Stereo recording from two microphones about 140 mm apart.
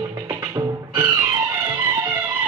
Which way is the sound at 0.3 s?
25° right (ahead or behind).